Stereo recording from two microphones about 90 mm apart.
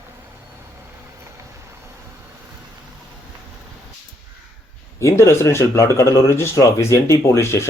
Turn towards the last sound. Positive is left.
turn(degrees=30)  # may be behind; listen again after turning